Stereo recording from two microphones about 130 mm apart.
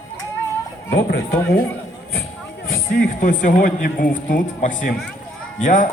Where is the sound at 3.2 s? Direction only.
90° left.